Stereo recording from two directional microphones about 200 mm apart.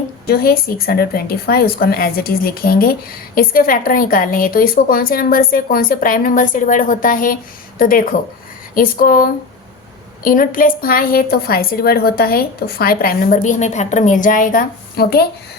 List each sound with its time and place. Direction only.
0.3 s a woman's voice: 50° left (ahead or behind)